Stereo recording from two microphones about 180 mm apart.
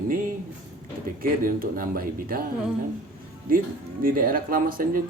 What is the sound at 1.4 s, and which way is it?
Speech, 55° right (ahead or behind).